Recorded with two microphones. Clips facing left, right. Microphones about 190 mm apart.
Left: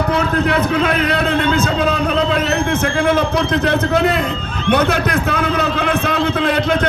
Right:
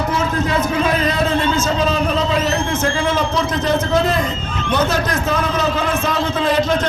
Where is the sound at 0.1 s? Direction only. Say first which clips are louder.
Left 3 dB; 60° left (ahead or behind).